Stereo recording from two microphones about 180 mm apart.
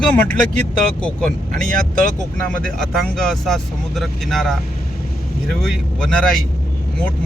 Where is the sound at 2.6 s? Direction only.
5° left (ahead or behind).